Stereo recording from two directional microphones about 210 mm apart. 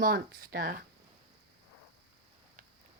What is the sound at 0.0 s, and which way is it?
Speech, 45° right (ahead or behind).